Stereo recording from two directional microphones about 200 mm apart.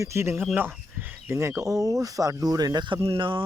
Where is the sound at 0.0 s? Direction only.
15° right (ahead or behind).